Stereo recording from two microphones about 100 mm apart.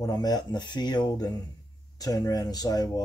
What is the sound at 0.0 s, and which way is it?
Speech, 40° left (ahead or behind).